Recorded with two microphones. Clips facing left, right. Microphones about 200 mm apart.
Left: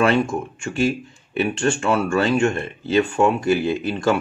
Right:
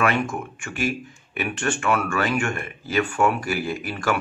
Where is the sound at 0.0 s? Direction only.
25° left (ahead or behind).